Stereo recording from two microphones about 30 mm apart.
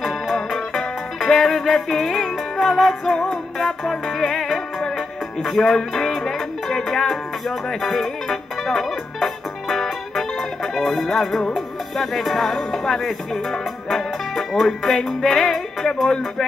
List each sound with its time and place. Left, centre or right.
0.0 s music: centre
3.1 s music: centre